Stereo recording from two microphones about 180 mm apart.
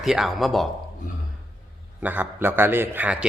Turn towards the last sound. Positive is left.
turn(degrees=-10)  # may be behind; listen again after turning